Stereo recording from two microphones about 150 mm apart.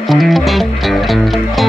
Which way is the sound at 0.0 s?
Centre (ahead or behind).